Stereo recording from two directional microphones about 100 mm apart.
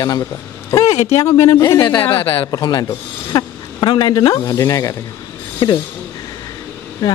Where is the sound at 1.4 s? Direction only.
30° left (ahead or behind).